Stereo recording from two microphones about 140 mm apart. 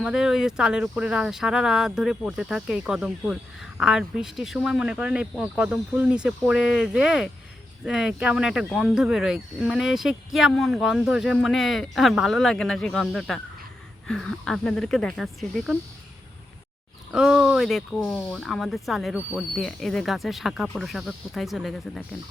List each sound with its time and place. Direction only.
0.0 s speech: 5° right (ahead or behind)
17.1 s speech: 5° right (ahead or behind)